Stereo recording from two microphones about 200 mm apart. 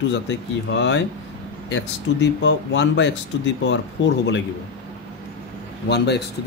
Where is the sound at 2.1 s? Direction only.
65° left (ahead or behind).